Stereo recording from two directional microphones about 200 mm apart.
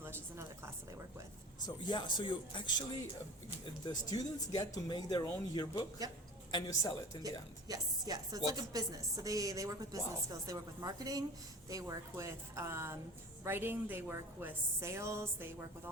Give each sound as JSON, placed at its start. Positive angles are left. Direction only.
{"t": 0.0, "sound": "speech", "side_deg": -10}
{"t": 1.6, "sound": "speech", "side_deg": 20}
{"t": 3.8, "sound": "speech", "side_deg": 20}
{"t": 6.0, "sound": "a woman's voice", "side_deg": -20}
{"t": 6.5, "sound": "a woman's voice", "side_deg": 20}
{"t": 7.2, "sound": "a woman's voice", "side_deg": -20}